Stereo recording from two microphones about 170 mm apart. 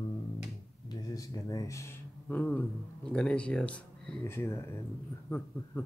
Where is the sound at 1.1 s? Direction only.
20° left (ahead or behind).